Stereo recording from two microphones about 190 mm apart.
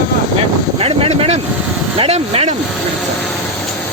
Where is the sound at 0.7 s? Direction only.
30° right (ahead or behind).